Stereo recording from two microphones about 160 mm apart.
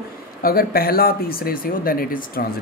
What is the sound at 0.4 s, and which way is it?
Speech, 70° left (ahead or behind).